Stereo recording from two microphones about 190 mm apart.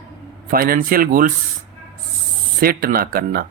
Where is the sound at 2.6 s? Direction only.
50° right (ahead or behind).